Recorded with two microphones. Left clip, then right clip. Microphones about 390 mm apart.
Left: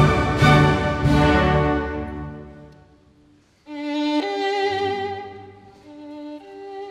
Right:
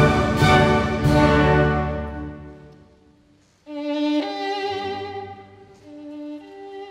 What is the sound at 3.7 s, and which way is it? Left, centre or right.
Music, left.